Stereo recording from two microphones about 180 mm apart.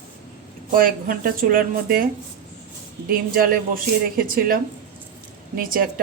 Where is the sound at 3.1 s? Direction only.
55° right (ahead or behind).